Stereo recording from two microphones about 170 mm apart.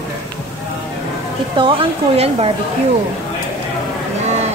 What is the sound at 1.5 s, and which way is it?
Speech, 30° right (ahead or behind).